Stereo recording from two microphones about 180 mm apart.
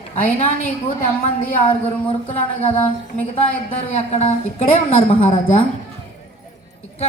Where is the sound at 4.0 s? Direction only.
35° left (ahead or behind).